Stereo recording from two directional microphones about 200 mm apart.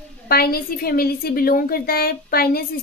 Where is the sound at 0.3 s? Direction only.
50° left (ahead or behind).